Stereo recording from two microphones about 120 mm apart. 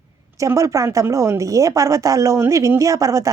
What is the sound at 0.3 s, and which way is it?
A woman's voice, 25° right (ahead or behind).